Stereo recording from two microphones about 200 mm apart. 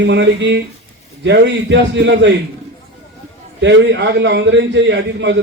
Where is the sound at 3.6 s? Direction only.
65° right (ahead or behind).